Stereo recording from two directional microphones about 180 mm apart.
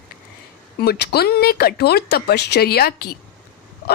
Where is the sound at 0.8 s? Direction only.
60° left (ahead or behind).